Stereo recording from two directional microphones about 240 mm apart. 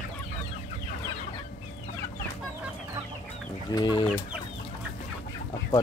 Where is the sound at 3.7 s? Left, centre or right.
Centre.